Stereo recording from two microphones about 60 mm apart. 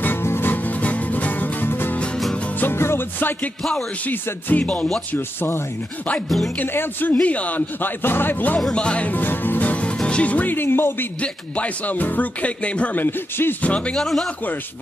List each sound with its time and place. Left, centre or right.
0.0 s music: left
3.7 s speech: left
5.1 s speech: left
6.2 s speech: centre
6.6 s speech: left
8.7 s music: centre
10.0 s speech: left
11.1 s speech: left
13.9 s speech: centre